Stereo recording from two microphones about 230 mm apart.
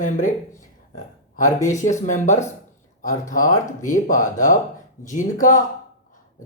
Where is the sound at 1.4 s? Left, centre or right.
Left.